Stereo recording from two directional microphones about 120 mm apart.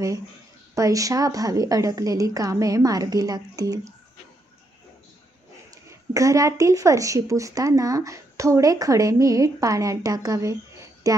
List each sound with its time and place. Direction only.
0.7 s a woman's voice: 30° right (ahead or behind)
5.7 s a woman's voice: 25° right (ahead or behind)